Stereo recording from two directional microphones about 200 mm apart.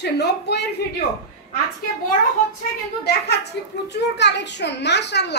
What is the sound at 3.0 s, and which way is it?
A child's voice, 55° left (ahead or behind).